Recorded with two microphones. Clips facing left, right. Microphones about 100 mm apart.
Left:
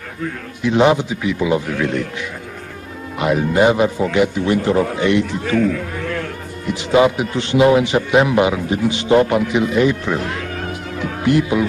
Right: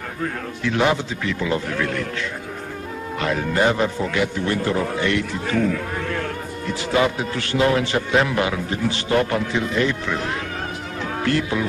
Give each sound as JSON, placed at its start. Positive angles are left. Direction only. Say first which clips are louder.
{"t": 0.6, "sound": "a man's voice", "louder": "left 6 dB", "side_deg": 20}
{"t": 3.2, "sound": "a man's voice", "louder": "left 6 dB", "side_deg": 15}
{"t": 6.7, "sound": "a man's voice", "louder": "left 6 dB", "side_deg": 20}
{"t": 11.2, "sound": "a man's voice", "louder": "left 7 dB", "side_deg": 15}